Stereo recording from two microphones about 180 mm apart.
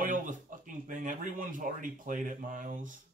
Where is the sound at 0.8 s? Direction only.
45° right (ahead or behind).